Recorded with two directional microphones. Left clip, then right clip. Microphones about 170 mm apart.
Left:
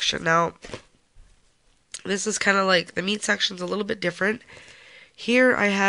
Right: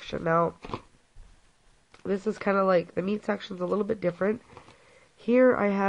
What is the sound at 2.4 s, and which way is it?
Speech, 25° left (ahead or behind).